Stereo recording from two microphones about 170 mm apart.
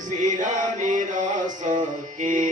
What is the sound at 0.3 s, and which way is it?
Mantra, 50° right (ahead or behind).